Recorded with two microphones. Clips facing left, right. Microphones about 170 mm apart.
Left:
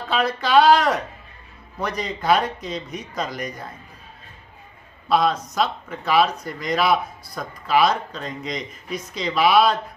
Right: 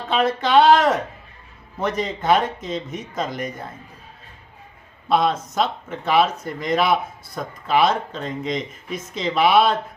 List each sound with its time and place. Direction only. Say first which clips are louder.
0.1 s speech: right 1 dB; 25° right (ahead or behind)
5.0 s speech: even; 25° right (ahead or behind)